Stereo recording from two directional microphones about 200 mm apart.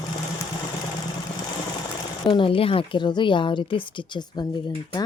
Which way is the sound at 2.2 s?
25° left (ahead or behind).